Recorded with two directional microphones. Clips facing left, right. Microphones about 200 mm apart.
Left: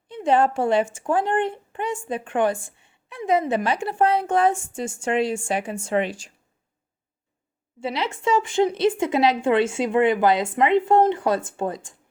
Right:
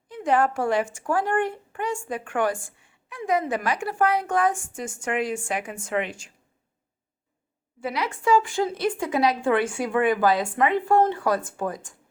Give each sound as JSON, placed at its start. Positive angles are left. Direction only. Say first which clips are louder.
{"t": 0.1, "sound": "a woman's voice", "louder": "left 3 dB", "side_deg": 25}
{"t": 7.8, "sound": "a woman's voice", "louder": "left 2 dB", "side_deg": 25}